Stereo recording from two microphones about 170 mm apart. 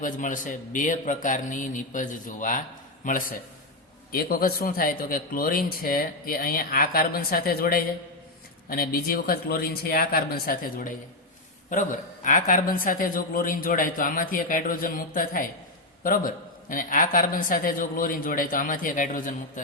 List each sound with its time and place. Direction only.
0.0 s a woman's voice: 50° left (ahead or behind)